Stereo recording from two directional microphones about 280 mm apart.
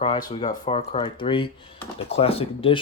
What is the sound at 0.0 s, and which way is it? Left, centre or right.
Speech, centre.